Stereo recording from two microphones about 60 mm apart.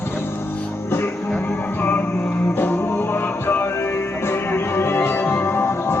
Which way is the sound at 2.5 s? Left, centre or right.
Left.